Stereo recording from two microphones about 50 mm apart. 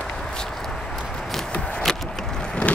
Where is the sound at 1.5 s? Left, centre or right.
Left.